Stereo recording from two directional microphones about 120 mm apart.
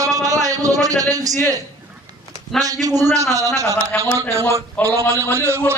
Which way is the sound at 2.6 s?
30° right (ahead or behind).